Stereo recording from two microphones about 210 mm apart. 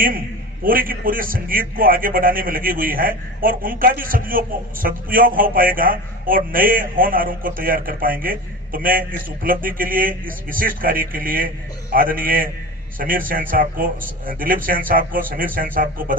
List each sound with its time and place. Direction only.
0.6 s a man's voice: 45° right (ahead or behind)